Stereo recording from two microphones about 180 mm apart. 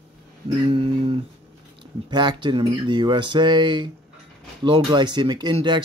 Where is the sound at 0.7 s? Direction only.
30° right (ahead or behind).